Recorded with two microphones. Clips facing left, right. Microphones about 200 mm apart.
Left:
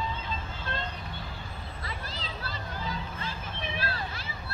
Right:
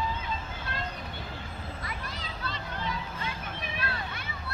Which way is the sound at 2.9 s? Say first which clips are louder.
Right 1 dB; 30° left (ahead or behind).